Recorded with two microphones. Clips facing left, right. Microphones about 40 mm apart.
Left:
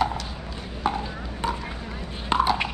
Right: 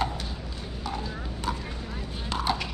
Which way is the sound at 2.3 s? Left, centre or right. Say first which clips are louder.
Left 10 dB; left.